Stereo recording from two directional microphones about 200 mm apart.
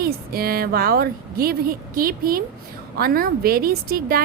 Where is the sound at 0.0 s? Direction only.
50° right (ahead or behind).